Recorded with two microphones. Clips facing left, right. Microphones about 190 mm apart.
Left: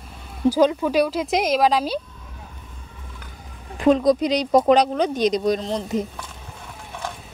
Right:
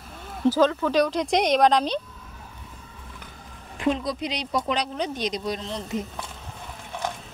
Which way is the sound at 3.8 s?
45° left (ahead or behind).